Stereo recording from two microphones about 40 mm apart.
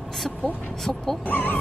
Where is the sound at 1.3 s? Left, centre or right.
Left.